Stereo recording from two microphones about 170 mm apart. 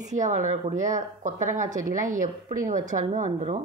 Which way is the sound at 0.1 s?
45° right (ahead or behind).